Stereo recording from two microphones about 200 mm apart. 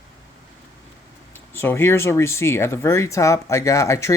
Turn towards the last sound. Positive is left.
turn(degrees=15)  # may be behind; listen again after turning